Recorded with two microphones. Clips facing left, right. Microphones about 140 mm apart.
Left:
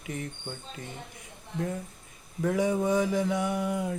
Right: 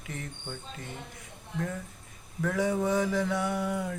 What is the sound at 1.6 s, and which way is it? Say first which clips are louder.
Mantra: left 2 dB; 30° left (ahead or behind).